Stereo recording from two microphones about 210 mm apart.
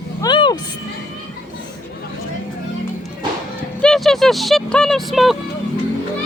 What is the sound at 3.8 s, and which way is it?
Speech, centre (ahead or behind).